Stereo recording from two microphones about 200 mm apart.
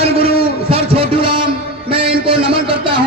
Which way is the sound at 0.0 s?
30° right (ahead or behind).